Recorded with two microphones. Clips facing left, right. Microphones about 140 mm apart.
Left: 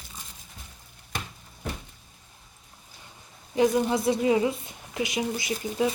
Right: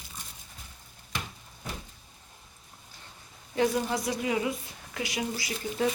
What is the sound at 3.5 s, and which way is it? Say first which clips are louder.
A woman's voice: left 4 dB; 20° left (ahead or behind).